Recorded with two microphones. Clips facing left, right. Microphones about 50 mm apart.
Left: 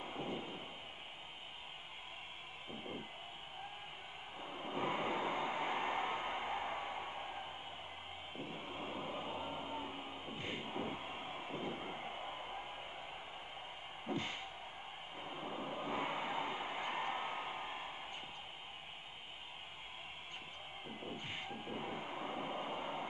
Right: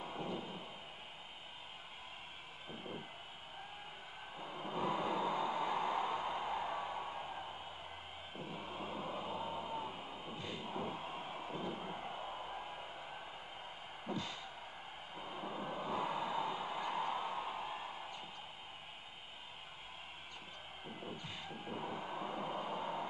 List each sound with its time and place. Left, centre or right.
0.0 s thunder: left
4.4 s vehicle: left
8.4 s train: left
10.1 s a sound: left; by 12.8 s centre
14.0 s a sound: left
21.2 s music: left
21.8 s train: left